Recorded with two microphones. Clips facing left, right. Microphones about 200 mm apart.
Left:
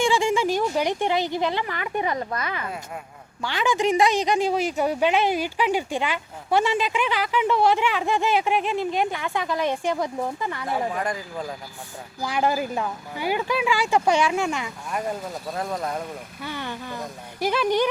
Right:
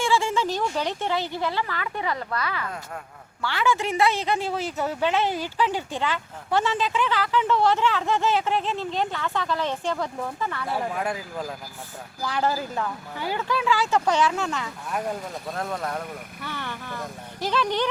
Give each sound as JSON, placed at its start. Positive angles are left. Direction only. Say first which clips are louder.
{"t": 0.0, "sound": "a woman's voice", "louder": "left 3 dB", "side_deg": 15}
{"t": 10.9, "sound": "speech", "louder": "left 1 dB", "side_deg": -5}
{"t": 12.2, "sound": "a woman's voice", "louder": "left 2 dB", "side_deg": 15}
{"t": 14.8, "sound": "a woman's voice", "louder": "left 1 dB", "side_deg": 0}